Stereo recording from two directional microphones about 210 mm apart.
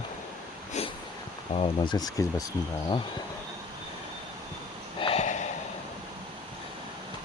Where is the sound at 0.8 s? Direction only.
30° left (ahead or behind).